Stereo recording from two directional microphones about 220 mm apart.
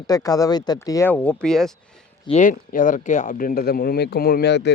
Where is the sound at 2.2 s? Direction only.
35° left (ahead or behind).